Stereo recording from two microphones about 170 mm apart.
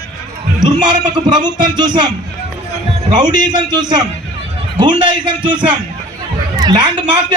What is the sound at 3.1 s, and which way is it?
A man's voice, 25° right (ahead or behind).